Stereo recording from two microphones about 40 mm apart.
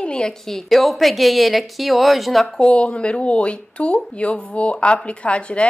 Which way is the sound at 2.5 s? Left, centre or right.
Left.